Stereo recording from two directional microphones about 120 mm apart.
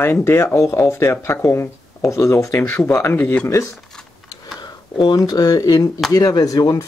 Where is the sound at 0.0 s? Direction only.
20° left (ahead or behind).